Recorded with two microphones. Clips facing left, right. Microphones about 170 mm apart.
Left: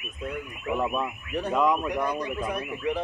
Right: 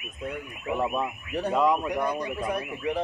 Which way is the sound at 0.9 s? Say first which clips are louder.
Even; 30° right (ahead or behind).